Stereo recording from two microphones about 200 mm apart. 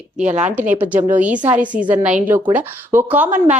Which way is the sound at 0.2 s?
5° right (ahead or behind).